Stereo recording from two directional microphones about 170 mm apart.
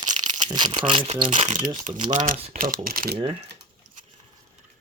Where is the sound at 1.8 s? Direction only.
45° right (ahead or behind).